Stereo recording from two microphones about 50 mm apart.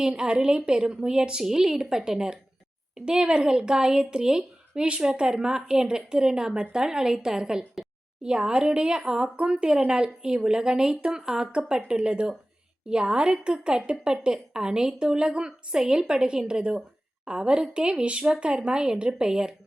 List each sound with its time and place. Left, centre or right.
0.0 s speech: centre